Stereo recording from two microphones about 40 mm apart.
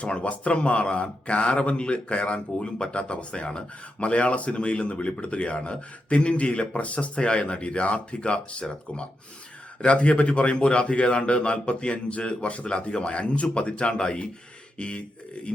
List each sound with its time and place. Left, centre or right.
0.0 s a man's voice: left